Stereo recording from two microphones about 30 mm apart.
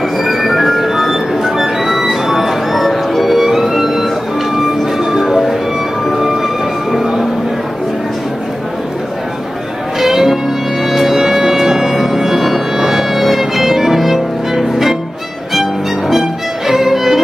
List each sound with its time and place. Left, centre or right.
0.2 s music: centre
3.4 s music: centre
9.9 s music: centre